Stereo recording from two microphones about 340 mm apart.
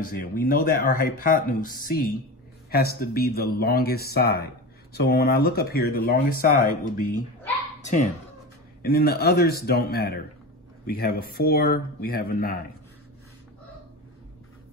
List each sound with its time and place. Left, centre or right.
0.0 s speech: left